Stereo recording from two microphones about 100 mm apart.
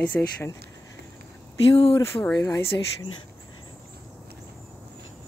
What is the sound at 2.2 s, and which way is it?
Speech, 10° left (ahead or behind).